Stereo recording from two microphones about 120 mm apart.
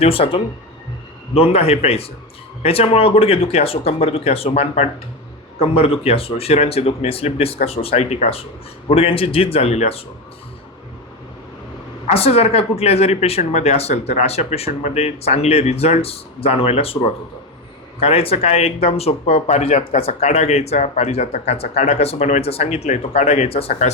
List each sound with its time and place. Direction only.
0.0 s speech: 50° left (ahead or behind)
12.0 s speech: 55° left (ahead or behind)
18.0 s speech: 55° left (ahead or behind)